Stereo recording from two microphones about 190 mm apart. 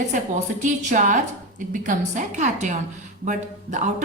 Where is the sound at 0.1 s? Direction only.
40° right (ahead or behind).